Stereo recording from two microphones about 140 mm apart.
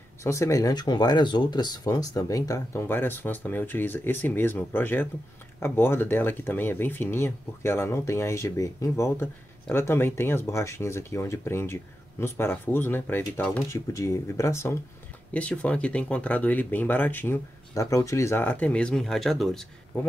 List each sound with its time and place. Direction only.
0.2 s speech: 20° left (ahead or behind); by 19.7 s centre (ahead or behind)